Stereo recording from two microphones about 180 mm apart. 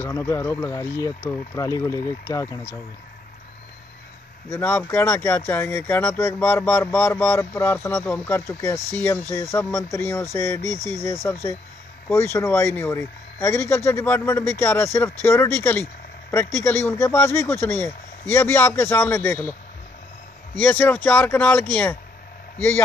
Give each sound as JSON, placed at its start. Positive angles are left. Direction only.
{"t": 0.0, "sound": "speech", "side_deg": 15}
{"t": 4.5, "sound": "speech", "side_deg": 10}
{"t": 20.5, "sound": "speech", "side_deg": 10}